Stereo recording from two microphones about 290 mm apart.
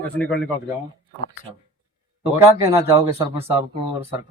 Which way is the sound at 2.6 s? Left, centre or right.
Centre.